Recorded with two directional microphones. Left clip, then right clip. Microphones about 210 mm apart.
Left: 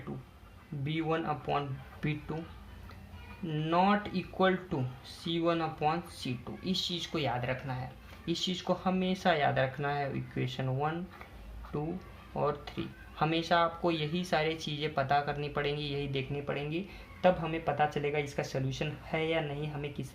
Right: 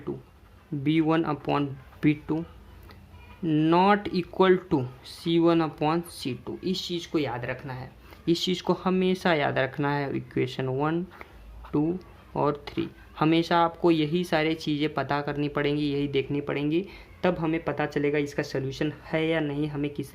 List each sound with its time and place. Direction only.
0.9 s speech: 50° right (ahead or behind)
3.4 s speech: 45° right (ahead or behind)